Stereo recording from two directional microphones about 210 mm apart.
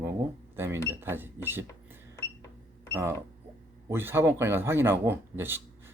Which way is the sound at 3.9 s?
10° right (ahead or behind).